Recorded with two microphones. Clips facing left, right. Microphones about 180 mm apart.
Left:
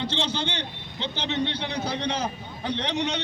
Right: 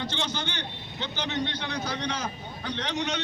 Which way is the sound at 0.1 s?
30° left (ahead or behind).